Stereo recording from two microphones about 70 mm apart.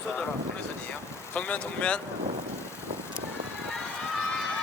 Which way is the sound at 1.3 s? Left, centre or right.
Left.